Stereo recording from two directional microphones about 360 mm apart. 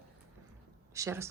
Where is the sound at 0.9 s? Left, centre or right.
Centre.